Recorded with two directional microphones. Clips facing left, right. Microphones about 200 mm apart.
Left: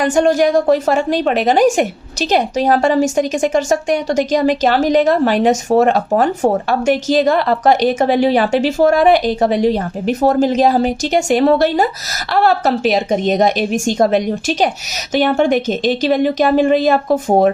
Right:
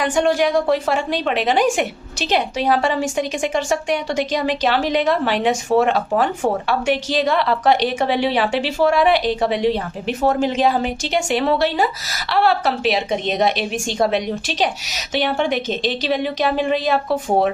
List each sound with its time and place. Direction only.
0.0 s a woman's voice: 45° left (ahead or behind)